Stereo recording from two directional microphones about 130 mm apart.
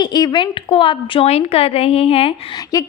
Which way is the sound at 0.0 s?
30° left (ahead or behind).